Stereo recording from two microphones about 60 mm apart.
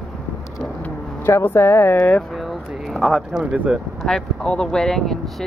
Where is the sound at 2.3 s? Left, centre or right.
Centre.